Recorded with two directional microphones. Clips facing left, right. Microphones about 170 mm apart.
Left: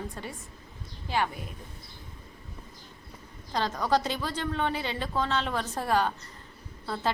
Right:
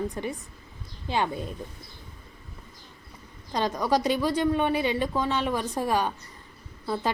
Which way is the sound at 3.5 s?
15° right (ahead or behind).